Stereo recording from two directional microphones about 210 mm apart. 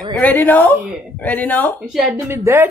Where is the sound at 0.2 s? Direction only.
10° left (ahead or behind).